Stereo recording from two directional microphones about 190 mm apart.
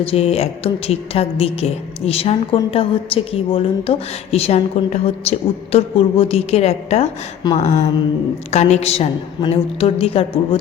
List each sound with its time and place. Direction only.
0.0 s a woman's voice: 30° left (ahead or behind)